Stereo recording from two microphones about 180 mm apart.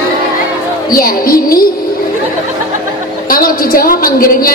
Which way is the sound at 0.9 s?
55° left (ahead or behind).